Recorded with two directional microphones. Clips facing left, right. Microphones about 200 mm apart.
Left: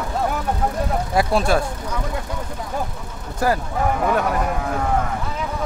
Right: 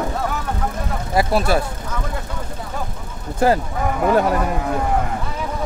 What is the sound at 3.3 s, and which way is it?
Speech, 25° right (ahead or behind).